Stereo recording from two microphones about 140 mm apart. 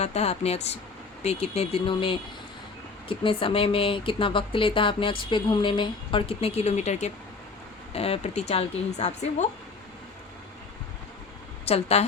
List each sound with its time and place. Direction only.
0.0 s speech: 50° left (ahead or behind)
11.6 s a woman's voice: 50° left (ahead or behind)